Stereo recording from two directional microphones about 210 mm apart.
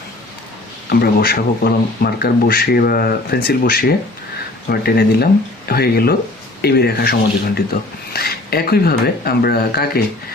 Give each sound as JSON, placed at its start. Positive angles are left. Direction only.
{"t": 0.9, "sound": "speech", "side_deg": 45}